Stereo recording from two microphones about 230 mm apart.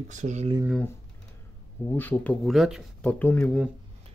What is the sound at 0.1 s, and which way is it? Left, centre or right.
Speech, right.